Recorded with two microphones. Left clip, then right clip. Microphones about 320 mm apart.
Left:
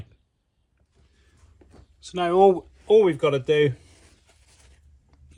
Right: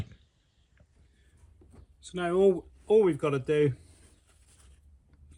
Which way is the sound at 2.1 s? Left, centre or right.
Left.